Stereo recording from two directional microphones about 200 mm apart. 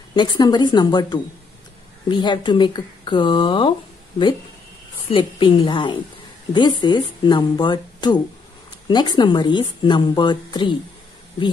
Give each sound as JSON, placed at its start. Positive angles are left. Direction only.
{"t": 0.1, "sound": "a woman's voice", "side_deg": 20}
{"t": 5.1, "sound": "a woman's voice", "side_deg": 25}